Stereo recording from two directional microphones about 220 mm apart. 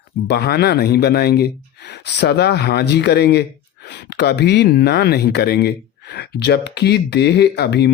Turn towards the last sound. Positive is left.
turn(degrees=50)  # may be behind; listen again after turning